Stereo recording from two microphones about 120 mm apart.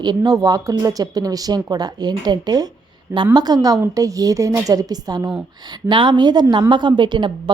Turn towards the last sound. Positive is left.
turn(degrees=-40)  # may be behind; listen again after turning